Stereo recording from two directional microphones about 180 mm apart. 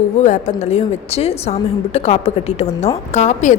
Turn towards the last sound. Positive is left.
turn(degrees=40)  # may be behind; listen again after turning